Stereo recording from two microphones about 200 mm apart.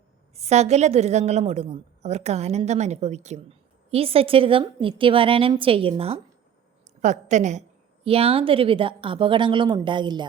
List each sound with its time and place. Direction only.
0.3 s a woman's voice: 35° right (ahead or behind)